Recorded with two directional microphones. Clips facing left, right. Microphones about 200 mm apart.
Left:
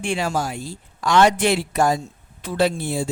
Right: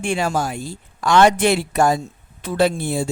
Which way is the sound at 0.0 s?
50° right (ahead or behind).